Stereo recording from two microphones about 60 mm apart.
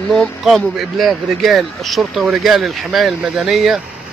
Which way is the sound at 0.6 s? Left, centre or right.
Centre.